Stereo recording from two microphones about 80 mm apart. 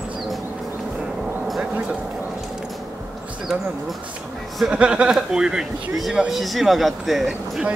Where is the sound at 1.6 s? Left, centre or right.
Centre.